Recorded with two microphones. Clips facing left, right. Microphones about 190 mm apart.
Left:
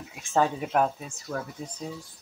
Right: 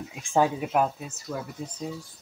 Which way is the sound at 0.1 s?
15° right (ahead or behind).